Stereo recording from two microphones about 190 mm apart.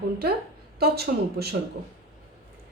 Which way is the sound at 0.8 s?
55° right (ahead or behind).